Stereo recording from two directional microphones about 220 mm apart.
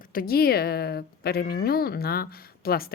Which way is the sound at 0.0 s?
40° left (ahead or behind).